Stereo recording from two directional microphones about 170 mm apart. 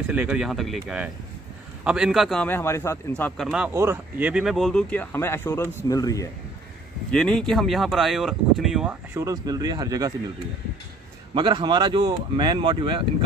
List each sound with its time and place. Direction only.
0.1 s a man's voice: 10° right (ahead or behind); by 3.4 s 10° left (ahead or behind)
3.4 s speech: 5° right (ahead or behind)
3.7 s speech: 15° right (ahead or behind); by 6.2 s 20° left (ahead or behind)
7.1 s speech: 5° left (ahead or behind)
9.1 s speech: 20° right (ahead or behind)
11.3 s speech: 25° right (ahead or behind)